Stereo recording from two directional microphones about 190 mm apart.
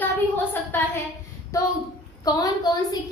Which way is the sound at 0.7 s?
10° left (ahead or behind).